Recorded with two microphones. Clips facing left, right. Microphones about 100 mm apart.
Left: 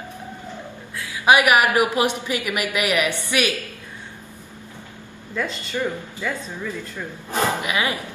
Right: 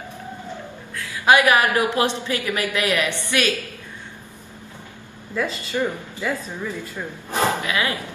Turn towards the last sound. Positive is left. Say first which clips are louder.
# even
turn(degrees=20)  # may be behind; listen again after turning